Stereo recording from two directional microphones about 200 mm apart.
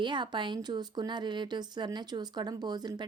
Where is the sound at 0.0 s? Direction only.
25° right (ahead or behind).